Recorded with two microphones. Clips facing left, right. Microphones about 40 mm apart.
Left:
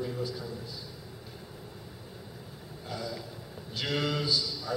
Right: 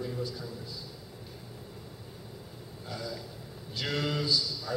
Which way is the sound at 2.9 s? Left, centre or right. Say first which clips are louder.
Left 1 dB; centre.